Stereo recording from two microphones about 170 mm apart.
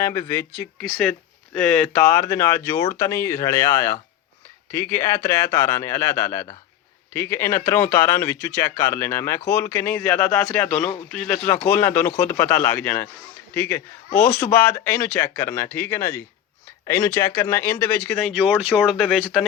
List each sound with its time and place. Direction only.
0.0 s speech: 15° left (ahead or behind)
18.2 s speech: centre (ahead or behind)